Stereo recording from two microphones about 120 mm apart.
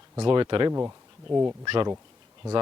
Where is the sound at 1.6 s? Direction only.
45° right (ahead or behind).